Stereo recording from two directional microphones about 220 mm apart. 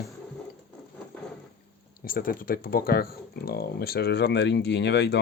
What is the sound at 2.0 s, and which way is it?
Speech, 40° left (ahead or behind).